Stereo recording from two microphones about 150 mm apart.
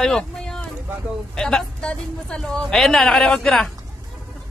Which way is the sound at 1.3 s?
5° left (ahead or behind).